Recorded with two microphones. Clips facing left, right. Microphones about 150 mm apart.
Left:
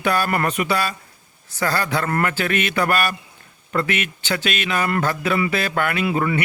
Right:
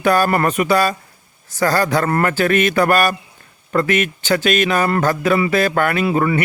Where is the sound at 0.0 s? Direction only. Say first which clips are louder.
Right 5 dB; 45° right (ahead or behind).